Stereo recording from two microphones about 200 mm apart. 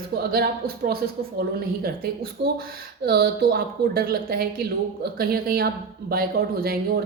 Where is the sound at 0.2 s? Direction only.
50° right (ahead or behind).